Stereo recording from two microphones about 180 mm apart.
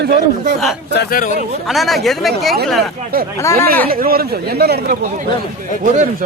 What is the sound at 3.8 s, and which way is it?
Speech, 55° right (ahead or behind).